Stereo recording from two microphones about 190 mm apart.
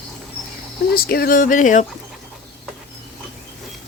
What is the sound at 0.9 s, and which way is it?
Speech, 55° left (ahead or behind).